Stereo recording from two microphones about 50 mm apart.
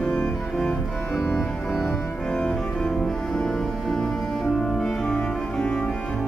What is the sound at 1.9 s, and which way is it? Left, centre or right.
Organ, centre.